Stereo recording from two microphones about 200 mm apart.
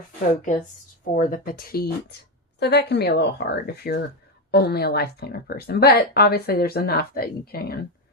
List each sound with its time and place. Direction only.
1.0 s speech: 45° left (ahead or behind)